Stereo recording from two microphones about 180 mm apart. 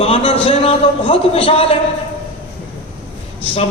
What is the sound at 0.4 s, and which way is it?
Speech, 35° left (ahead or behind).